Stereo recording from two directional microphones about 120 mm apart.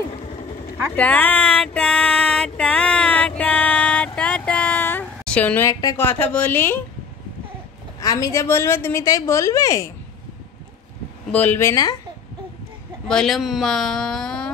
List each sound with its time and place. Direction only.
0.9 s a sound: 15° left (ahead or behind)
5.7 s a woman's voice: 35° left (ahead or behind)
5.9 s speech: 15° left (ahead or behind)
8.0 s a woman's voice: 30° left (ahead or behind)
11.3 s speech: 15° left (ahead or behind)
11.7 s a woman's voice: 35° left (ahead or behind)
13.1 s speech: centre (ahead or behind)